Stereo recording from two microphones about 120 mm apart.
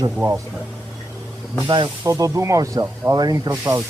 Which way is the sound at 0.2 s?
25° right (ahead or behind).